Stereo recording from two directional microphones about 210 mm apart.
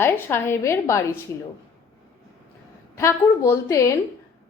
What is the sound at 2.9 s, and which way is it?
A woman's voice, 10° left (ahead or behind).